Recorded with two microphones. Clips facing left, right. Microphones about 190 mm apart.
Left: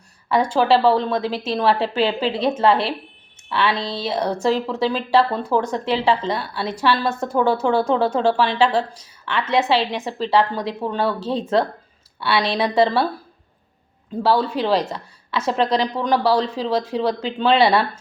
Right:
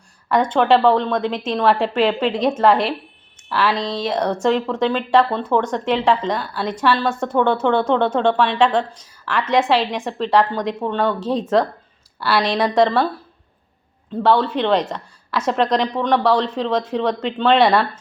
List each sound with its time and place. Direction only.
0.3 s a woman's voice: 5° left (ahead or behind)
3.8 s speech: 30° left (ahead or behind)
4.0 s a woman's voice: 5° left (ahead or behind)
11.2 s speech: 30° left (ahead or behind)
12.2 s a woman's voice: centre (ahead or behind)
14.2 s a woman's voice: 5° left (ahead or behind)